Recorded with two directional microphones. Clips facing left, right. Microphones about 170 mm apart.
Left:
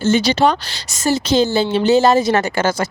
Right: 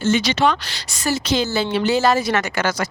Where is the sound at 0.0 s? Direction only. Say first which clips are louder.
Left 3 dB; 35° left (ahead or behind).